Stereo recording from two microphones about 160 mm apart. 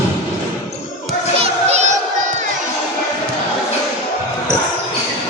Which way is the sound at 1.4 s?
45° right (ahead or behind).